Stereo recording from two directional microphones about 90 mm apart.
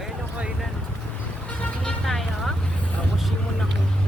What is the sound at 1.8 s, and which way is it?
Music, 5° left (ahead or behind).